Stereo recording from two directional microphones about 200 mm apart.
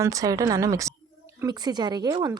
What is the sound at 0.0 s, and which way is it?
A woman's voice, 15° right (ahead or behind).